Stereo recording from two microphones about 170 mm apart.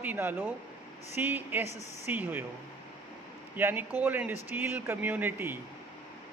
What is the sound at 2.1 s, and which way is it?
Speech, 10° right (ahead or behind).